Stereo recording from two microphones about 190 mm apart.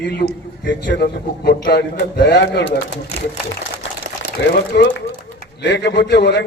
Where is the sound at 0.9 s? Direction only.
55° left (ahead or behind).